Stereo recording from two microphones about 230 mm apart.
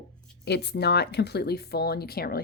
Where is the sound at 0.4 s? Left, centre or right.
Left.